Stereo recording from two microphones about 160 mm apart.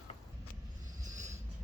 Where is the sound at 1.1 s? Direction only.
50° right (ahead or behind).